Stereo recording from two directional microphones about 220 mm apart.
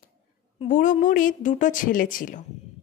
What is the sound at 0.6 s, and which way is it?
Speech, 35° left (ahead or behind).